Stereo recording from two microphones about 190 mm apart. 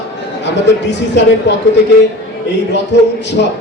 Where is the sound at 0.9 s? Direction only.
65° left (ahead or behind).